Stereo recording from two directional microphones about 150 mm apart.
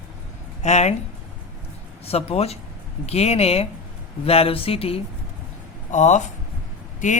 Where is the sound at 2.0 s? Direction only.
40° left (ahead or behind).